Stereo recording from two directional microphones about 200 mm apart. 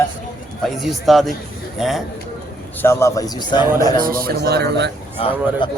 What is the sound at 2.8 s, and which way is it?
Speech, 15° left (ahead or behind).